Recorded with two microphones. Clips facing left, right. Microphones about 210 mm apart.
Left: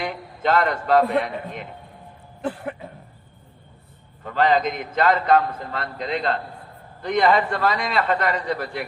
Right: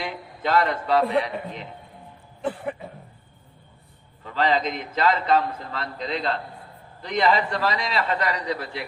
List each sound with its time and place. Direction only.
0.5 s a man's voice: 50° left (ahead or behind)
2.4 s a sound: centre (ahead or behind)
4.2 s a man's voice: 50° left (ahead or behind)